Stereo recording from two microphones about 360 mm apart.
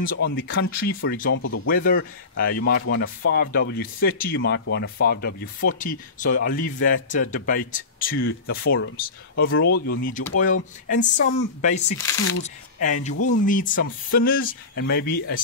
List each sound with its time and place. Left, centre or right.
0.0 s speech: left
1.3 s speech: left
1.7 s speech: left
11.3 s speech: centre
13.1 s speech: left
13.5 s speech: left